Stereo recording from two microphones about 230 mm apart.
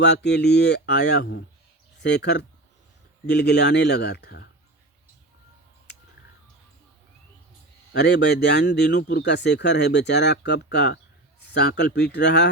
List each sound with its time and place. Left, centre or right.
0.0 s speech: left
7.9 s speech: left